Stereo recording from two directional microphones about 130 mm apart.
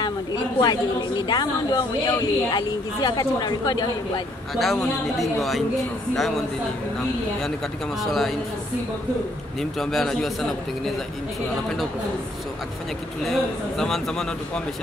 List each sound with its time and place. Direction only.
0.6 s a woman's voice: 30° left (ahead or behind)
4.6 s a man's voice: centre (ahead or behind)
8.0 s a man's voice: centre (ahead or behind)
9.6 s a man's voice: centre (ahead or behind)
13.3 s a man's voice: centre (ahead or behind)